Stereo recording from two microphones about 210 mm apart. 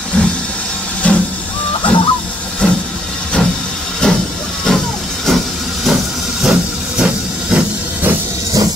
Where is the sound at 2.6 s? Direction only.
5° left (ahead or behind).